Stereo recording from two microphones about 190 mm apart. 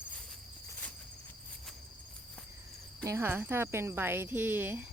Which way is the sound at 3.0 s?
15° right (ahead or behind).